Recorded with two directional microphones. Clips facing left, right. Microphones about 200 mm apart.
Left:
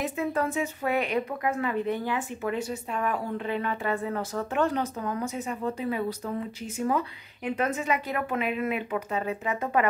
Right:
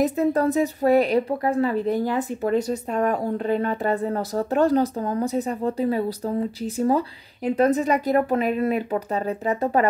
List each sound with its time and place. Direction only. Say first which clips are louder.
0.0 s a woman's voice: right 8 dB; 40° right (ahead or behind)